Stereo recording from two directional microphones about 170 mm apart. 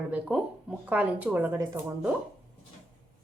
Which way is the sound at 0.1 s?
5° right (ahead or behind).